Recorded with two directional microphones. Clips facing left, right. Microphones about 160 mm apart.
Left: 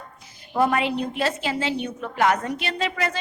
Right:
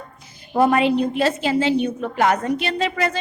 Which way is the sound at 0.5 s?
30° right (ahead or behind).